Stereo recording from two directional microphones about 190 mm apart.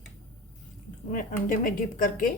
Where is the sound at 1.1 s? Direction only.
45° left (ahead or behind).